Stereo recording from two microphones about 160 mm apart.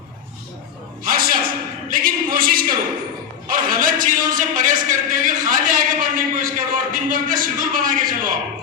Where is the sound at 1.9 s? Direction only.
65° right (ahead or behind).